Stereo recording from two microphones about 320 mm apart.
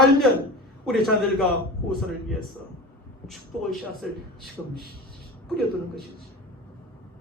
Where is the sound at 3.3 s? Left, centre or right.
Centre.